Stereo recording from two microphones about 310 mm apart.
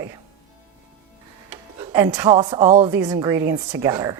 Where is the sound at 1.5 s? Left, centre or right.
Centre.